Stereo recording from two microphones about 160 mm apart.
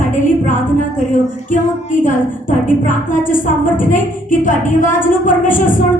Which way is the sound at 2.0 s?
55° left (ahead or behind).